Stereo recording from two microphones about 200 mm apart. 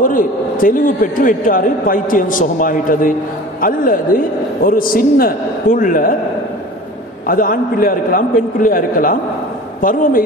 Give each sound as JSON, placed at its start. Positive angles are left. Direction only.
{"t": 0.0, "sound": "a man's voice", "side_deg": 45}
{"t": 7.2, "sound": "a man's voice", "side_deg": 45}